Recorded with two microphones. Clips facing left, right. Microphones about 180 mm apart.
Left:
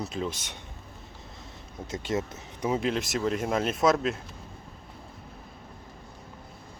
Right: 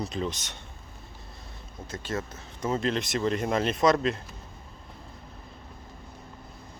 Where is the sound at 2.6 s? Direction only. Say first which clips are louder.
Even; 10° left (ahead or behind).